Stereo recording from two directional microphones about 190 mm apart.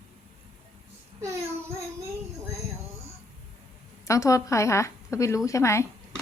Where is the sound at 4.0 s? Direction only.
15° left (ahead or behind).